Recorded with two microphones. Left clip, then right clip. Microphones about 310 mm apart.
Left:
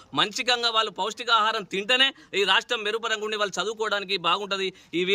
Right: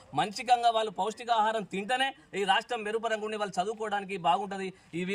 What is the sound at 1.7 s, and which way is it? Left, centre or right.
A man's voice, centre.